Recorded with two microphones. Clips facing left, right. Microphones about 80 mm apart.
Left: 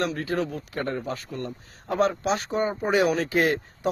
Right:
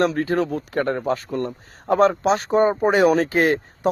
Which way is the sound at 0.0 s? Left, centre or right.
Right.